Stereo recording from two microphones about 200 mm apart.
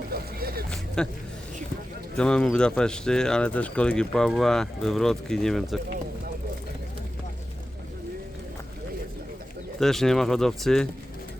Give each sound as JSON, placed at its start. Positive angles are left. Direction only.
{"t": 0.1, "sound": "vehicle", "side_deg": -50}
{"t": 1.0, "sound": "speech", "side_deg": 5}
{"t": 2.1, "sound": "speech", "side_deg": 5}
{"t": 9.8, "sound": "speech", "side_deg": 0}